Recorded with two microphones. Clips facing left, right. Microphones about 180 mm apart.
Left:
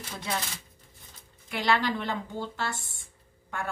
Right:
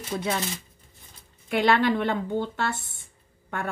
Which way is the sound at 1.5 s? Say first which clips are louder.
Right 6 dB; 60° right (ahead or behind).